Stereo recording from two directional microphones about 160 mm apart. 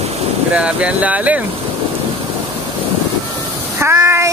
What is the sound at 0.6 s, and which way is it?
Speech, 5° right (ahead or behind).